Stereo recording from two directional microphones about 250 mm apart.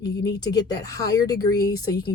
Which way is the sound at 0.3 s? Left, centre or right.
Centre.